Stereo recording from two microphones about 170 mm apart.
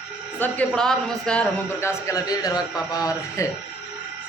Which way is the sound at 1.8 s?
15° left (ahead or behind).